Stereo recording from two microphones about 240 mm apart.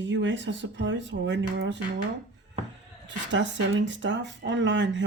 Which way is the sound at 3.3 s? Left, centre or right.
Right.